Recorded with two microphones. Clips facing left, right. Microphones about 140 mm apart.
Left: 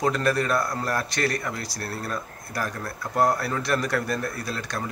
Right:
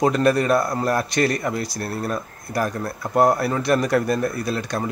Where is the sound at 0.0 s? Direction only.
20° right (ahead or behind).